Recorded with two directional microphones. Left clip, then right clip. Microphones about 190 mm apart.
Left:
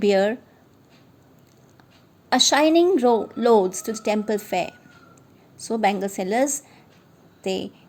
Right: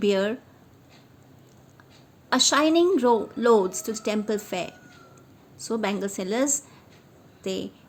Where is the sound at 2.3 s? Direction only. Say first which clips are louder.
Left 3 dB; 20° left (ahead or behind).